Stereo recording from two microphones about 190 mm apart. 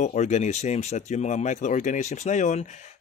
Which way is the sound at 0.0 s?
40° left (ahead or behind).